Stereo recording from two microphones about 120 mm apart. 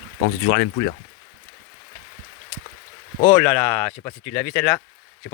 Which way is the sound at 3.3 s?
20° left (ahead or behind).